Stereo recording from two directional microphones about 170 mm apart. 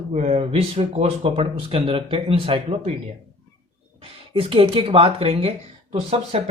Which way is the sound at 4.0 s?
30° right (ahead or behind).